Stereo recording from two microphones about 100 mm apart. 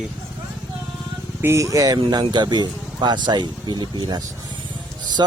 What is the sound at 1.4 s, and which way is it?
Speech, 25° right (ahead or behind).